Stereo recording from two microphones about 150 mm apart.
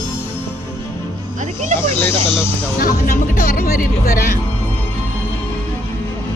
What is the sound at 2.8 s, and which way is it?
Speech, 75° left (ahead or behind).